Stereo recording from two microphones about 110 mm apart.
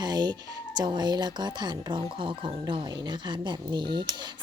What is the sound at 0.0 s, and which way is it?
Music, 40° right (ahead or behind).